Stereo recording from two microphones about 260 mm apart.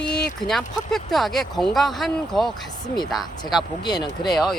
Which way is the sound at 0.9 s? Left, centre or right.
Centre.